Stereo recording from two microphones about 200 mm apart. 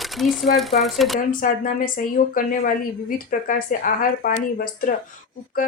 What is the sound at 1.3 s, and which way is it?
A woman's voice, 45° left (ahead or behind).